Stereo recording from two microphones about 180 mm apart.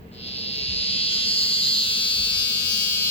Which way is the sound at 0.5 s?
30° left (ahead or behind).